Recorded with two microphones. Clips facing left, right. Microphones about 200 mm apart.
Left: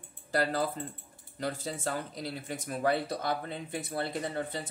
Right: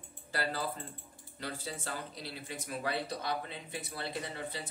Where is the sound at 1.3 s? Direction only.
45° left (ahead or behind).